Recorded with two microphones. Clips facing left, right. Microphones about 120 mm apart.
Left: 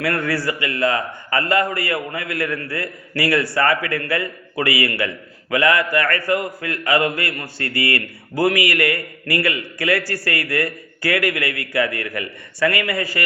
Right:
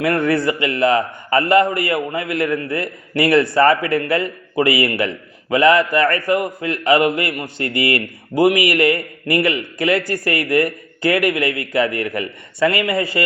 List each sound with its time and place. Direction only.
0.0 s a man's voice: 20° right (ahead or behind)